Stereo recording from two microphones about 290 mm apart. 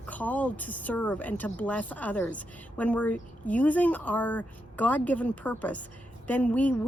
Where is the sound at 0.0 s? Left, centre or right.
Centre.